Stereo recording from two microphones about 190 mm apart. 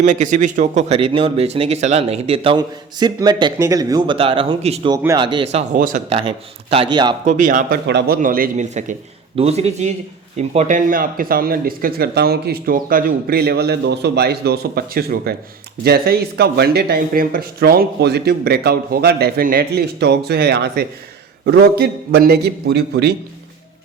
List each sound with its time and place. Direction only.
0.0 s speech: 40° right (ahead or behind)
5.7 s speech: 45° right (ahead or behind)
6.1 s speech: 30° right (ahead or behind)
7.3 s speech: 45° right (ahead or behind)
7.9 s a man's voice: 60° right (ahead or behind)